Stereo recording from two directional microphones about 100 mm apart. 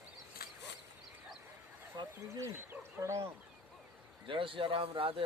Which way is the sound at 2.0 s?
40° right (ahead or behind).